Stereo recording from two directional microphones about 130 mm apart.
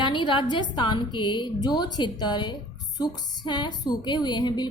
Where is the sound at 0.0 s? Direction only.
35° left (ahead or behind).